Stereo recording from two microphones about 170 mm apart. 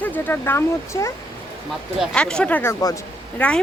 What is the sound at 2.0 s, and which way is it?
Speech, 5° left (ahead or behind).